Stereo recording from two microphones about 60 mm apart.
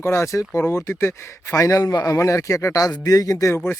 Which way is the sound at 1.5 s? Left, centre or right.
Left.